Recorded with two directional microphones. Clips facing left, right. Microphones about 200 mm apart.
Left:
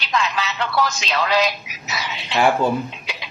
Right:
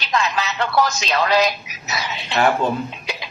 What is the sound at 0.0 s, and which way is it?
Speech, 45° right (ahead or behind).